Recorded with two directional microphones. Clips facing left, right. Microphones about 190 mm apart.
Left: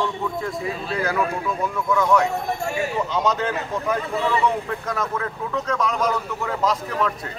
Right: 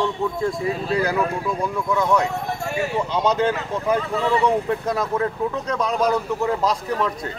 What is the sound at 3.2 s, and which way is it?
Speech, 30° right (ahead or behind).